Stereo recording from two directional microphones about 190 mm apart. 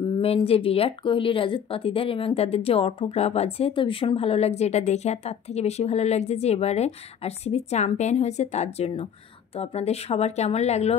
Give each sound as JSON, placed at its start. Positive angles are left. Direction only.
{"t": 0.2, "sound": "speech", "side_deg": 30}